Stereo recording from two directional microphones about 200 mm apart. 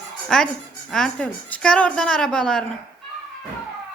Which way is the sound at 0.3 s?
5° left (ahead or behind).